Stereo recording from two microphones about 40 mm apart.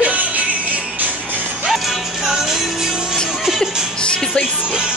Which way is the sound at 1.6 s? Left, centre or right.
Centre.